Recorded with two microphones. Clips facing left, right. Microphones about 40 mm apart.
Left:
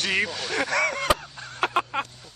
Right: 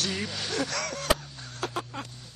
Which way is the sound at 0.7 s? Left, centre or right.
Left.